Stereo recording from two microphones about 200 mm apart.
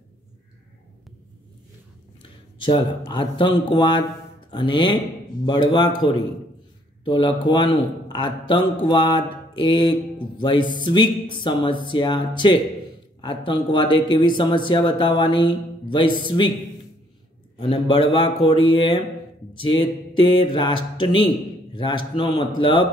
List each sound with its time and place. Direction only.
2.6 s a man's voice: 25° left (ahead or behind)
17.6 s a man's voice: 25° left (ahead or behind)